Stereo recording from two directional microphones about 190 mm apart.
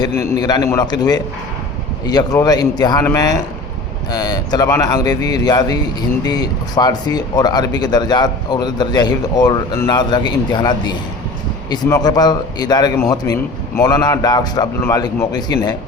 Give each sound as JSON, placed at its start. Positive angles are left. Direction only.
{"t": 0.1, "sound": "speech", "side_deg": 15}